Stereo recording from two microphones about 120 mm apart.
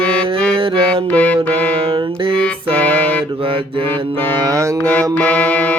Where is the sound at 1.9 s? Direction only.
45° right (ahead or behind).